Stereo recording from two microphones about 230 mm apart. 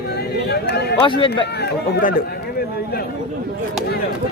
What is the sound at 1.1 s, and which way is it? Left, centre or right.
Speech, left.